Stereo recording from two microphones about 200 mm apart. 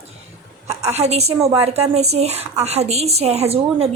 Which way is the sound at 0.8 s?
30° right (ahead or behind).